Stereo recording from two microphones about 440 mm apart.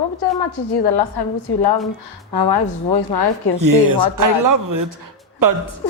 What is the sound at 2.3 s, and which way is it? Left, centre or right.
Speech, left.